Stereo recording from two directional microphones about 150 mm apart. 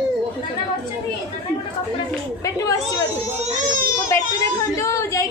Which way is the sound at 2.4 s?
20° left (ahead or behind).